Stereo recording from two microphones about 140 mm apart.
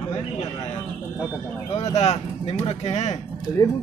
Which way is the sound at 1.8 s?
50° left (ahead or behind).